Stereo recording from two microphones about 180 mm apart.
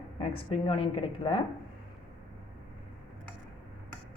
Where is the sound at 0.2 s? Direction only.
35° left (ahead or behind).